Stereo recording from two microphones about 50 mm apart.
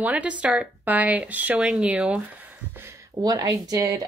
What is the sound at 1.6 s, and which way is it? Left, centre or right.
Speech, right.